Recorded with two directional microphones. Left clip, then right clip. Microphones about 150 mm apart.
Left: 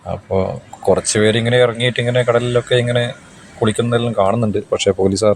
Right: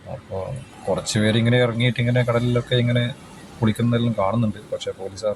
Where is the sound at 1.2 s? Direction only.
10° left (ahead or behind).